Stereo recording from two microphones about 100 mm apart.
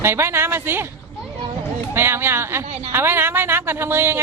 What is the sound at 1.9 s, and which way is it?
A woman's voice, 25° right (ahead or behind).